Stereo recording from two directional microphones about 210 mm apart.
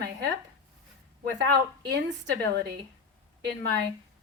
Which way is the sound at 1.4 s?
55° right (ahead or behind).